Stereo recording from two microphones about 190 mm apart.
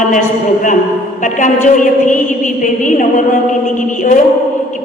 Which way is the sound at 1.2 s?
40° left (ahead or behind).